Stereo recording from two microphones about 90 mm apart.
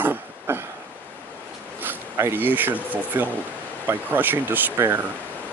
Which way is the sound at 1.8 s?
25° right (ahead or behind).